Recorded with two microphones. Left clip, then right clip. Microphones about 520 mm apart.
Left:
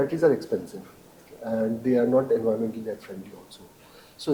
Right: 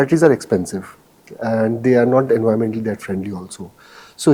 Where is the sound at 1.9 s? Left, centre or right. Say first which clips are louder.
Right 8 dB; right.